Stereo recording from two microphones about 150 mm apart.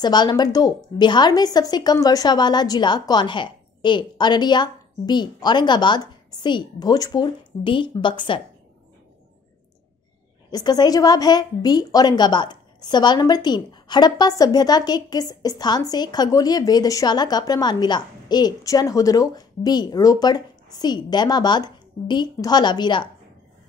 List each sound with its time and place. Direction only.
0.0 s a woman's voice: 30° left (ahead or behind)
10.5 s a woman's voice: 25° left (ahead or behind)